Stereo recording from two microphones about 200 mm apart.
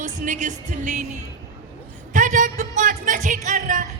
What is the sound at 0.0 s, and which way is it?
Speech, 40° right (ahead or behind).